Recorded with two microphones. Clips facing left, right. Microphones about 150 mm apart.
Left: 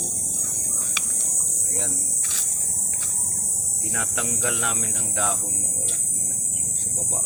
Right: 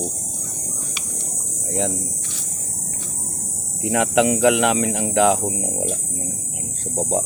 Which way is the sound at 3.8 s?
90° right.